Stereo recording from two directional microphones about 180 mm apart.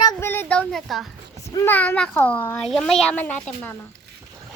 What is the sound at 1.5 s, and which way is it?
A child's voice, 15° left (ahead or behind).